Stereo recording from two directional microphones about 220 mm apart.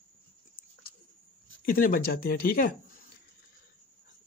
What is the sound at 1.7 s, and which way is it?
Speech, 40° left (ahead or behind).